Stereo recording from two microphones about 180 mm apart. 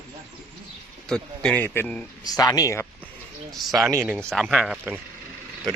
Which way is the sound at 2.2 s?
20° left (ahead or behind).